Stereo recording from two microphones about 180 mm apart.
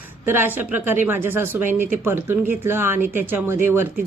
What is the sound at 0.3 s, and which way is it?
Speech, 10° right (ahead or behind).